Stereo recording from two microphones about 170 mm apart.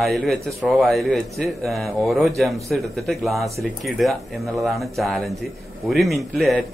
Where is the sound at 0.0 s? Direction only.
Centre (ahead or behind).